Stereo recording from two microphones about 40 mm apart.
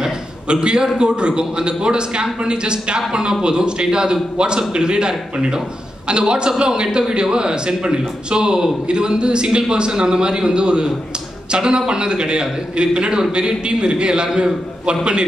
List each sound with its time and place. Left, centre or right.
0.5 s a man's voice: right